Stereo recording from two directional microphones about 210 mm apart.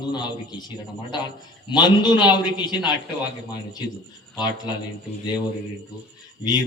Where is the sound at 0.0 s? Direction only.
20° left (ahead or behind).